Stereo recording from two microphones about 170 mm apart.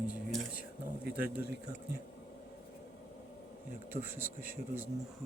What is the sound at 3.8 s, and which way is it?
Speech, 15° right (ahead or behind).